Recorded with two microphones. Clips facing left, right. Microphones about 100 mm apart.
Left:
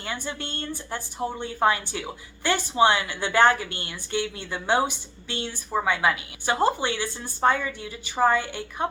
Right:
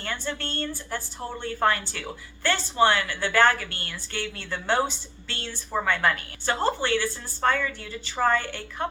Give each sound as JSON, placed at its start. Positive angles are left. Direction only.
{"t": 0.0, "sound": "a woman's voice", "side_deg": 15}